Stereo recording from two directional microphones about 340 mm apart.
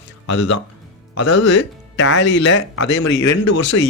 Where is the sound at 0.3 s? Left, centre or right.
Left.